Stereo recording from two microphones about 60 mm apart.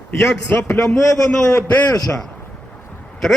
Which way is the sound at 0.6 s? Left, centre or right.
Left.